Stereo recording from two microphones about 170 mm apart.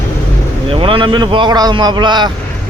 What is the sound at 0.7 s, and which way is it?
Speech, 30° right (ahead or behind).